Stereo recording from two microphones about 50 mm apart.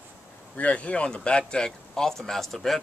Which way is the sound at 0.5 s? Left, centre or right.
Left.